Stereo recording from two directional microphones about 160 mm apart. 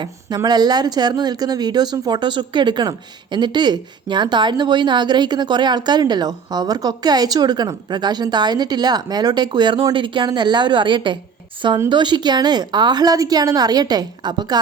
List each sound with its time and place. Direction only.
0.0 s speech: 25° right (ahead or behind)